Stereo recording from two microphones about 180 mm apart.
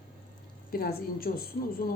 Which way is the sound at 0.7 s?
55° left (ahead or behind).